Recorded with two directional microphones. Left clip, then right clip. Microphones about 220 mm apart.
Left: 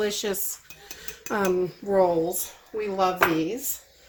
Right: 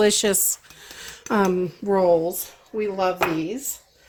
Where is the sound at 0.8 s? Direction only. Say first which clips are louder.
Right 3 dB; 55° right (ahead or behind).